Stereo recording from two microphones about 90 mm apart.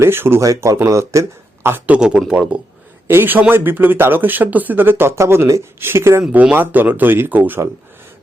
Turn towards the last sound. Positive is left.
turn(degrees=-20)  # may be behind; listen again after turning